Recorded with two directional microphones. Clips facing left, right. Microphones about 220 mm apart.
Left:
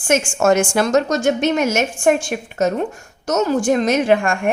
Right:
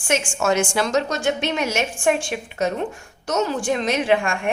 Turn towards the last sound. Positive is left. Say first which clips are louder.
# left 4 dB
turn(degrees=45)  # may be behind; listen again after turning